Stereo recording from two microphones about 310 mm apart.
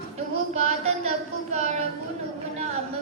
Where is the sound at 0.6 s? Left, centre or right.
Right.